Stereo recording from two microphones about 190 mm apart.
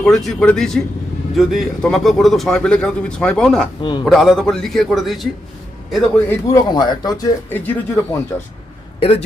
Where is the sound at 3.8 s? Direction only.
25° left (ahead or behind).